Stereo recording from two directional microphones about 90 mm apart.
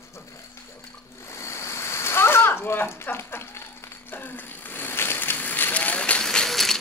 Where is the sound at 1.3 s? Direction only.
30° left (ahead or behind); by 6.8 s 5° left (ahead or behind).